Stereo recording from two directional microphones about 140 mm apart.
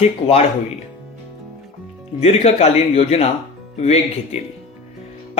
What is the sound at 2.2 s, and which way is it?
Speech, 50° left (ahead or behind).